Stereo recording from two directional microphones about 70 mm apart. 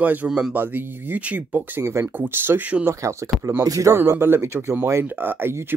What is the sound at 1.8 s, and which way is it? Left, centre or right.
Speech, right.